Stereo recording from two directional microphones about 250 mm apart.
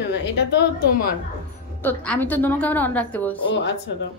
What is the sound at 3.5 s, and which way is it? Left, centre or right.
Speech, left.